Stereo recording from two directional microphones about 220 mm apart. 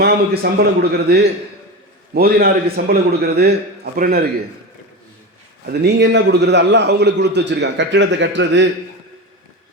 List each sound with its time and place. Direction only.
0.4 s a man's voice: 45° right (ahead or behind)
5.6 s a man's voice: 50° right (ahead or behind)